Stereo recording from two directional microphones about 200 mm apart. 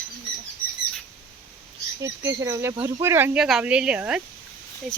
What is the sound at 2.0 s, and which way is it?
Speech, 15° right (ahead or behind).